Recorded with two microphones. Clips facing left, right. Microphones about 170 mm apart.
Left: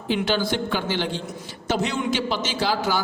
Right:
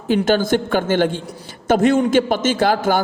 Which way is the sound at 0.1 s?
45° right (ahead or behind).